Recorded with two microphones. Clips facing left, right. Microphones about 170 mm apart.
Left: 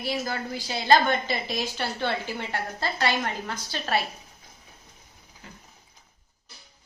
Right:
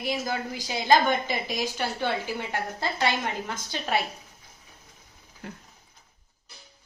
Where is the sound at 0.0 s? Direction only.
15° right (ahead or behind).